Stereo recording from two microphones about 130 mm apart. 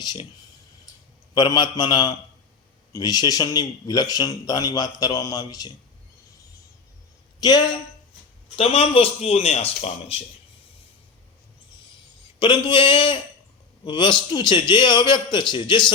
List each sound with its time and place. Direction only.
0.0 s speech: 30° left (ahead or behind)
1.3 s speech: 30° left (ahead or behind)
7.3 s speech: 30° left (ahead or behind)
8.5 s speech: 50° left (ahead or behind)
12.4 s speech: 40° left (ahead or behind)